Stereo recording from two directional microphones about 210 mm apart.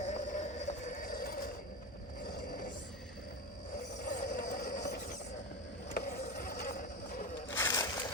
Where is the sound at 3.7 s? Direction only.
35° left (ahead or behind).